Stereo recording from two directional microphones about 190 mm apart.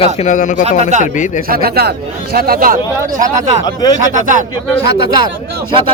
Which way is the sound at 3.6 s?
20° left (ahead or behind).